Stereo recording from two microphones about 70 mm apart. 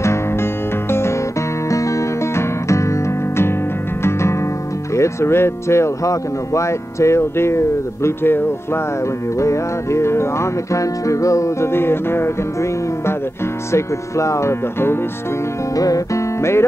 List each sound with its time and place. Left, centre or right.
0.0 s music: left
1.7 s music: left
4.9 s speech: left
9.4 s music: left
13.7 s music: left
15.7 s music: left